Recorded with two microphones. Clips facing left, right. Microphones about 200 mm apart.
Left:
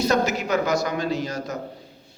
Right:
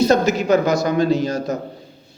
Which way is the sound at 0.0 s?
25° right (ahead or behind).